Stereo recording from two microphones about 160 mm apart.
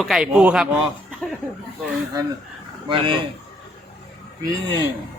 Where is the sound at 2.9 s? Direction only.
30° right (ahead or behind).